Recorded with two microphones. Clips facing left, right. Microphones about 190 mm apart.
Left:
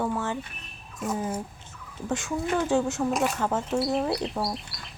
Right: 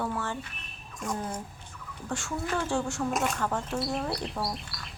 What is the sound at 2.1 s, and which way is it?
Speech, 20° left (ahead or behind).